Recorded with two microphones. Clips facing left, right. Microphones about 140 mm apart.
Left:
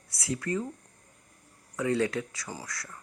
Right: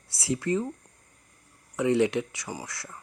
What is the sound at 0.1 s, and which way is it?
Speech, 30° right (ahead or behind).